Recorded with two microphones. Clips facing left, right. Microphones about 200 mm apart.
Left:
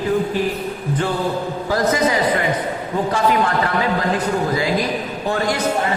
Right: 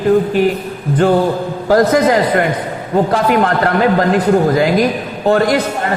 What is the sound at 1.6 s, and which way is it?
A man's voice, 55° right (ahead or behind).